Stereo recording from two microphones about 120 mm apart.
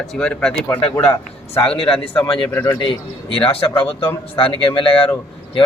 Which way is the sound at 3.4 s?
45° left (ahead or behind).